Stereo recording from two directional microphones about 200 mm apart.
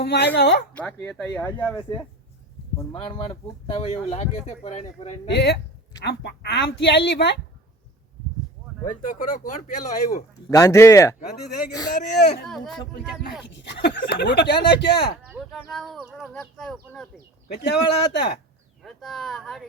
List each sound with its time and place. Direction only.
0.0 s a woman's voice: 55° left (ahead or behind)
0.7 s speech: 10° left (ahead or behind)
2.9 s speech: 25° left (ahead or behind)
5.3 s speech: 55° left (ahead or behind)
8.9 s speech: 40° left (ahead or behind)
10.5 s speech: 15° left (ahead or behind)
11.9 s speech: 55° left (ahead or behind)
12.5 s speech: centre (ahead or behind)
13.5 s speech: 60° left (ahead or behind)
15.3 s speech: centre (ahead or behind)
17.5 s speech: 55° left (ahead or behind)
18.8 s speech: centre (ahead or behind)